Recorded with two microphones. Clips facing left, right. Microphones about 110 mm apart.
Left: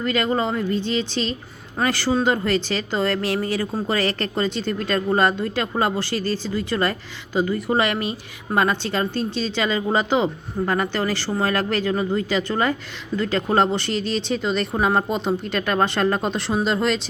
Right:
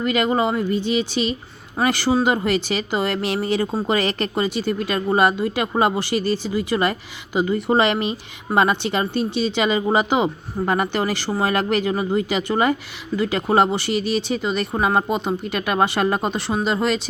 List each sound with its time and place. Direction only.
0.0 s speech: 15° right (ahead or behind)